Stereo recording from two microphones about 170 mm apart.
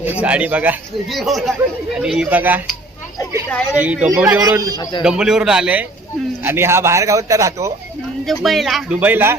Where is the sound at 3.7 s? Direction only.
5° right (ahead or behind).